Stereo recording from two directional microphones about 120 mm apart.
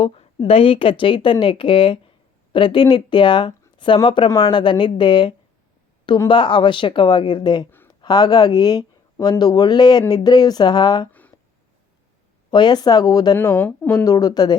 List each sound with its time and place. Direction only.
0.0 s a woman's voice: 55° left (ahead or behind)
4.3 s speech: 30° left (ahead or behind)
4.5 s speech: 40° left (ahead or behind)
11.1 s a sound: 15° left (ahead or behind)
12.5 s speech: 40° left (ahead or behind)
13.3 s speech: 15° left (ahead or behind)
13.9 s speech: 30° left (ahead or behind)